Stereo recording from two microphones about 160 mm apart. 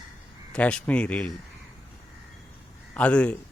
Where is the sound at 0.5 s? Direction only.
5° left (ahead or behind).